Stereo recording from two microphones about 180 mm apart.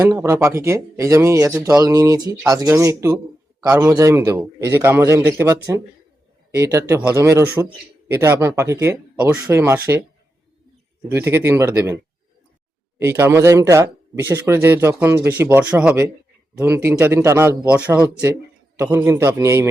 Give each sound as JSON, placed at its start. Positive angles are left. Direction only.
{"t": 0.0, "sound": "speech", "side_deg": -15}
{"t": 11.1, "sound": "speech", "side_deg": -15}
{"t": 13.0, "sound": "speech", "side_deg": -15}